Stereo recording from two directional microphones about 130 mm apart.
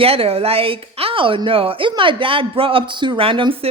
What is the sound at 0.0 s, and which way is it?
A woman's voice, 50° right (ahead or behind).